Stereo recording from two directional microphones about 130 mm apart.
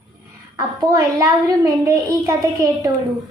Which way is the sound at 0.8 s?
25° right (ahead or behind).